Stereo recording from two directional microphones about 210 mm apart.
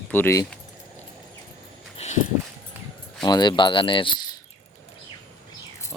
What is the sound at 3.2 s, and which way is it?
Speech, 20° left (ahead or behind).